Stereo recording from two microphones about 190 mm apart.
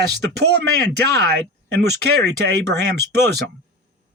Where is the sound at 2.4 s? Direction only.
60° right (ahead or behind).